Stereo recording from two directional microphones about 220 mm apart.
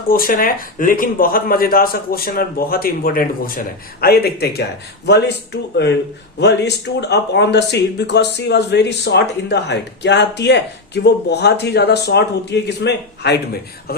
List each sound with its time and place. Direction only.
0.1 s speech: 40° left (ahead or behind)